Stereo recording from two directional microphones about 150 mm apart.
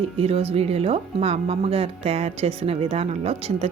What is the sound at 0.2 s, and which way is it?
Speech, 40° right (ahead or behind).